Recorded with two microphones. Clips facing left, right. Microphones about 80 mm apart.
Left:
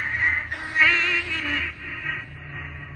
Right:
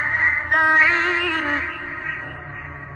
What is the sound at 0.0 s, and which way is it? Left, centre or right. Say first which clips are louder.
Music: right 4 dB; right.